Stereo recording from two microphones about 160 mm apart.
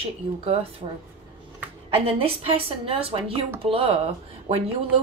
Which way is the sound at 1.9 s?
35° right (ahead or behind).